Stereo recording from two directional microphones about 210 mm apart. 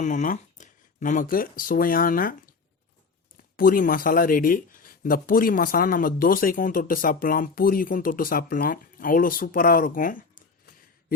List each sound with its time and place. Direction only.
0.0 s speech: 40° left (ahead or behind)
3.6 s speech: 40° left (ahead or behind)